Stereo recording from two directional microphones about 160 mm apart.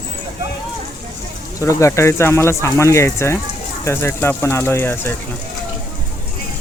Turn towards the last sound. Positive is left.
turn(degrees=15)  # may be behind; listen again after turning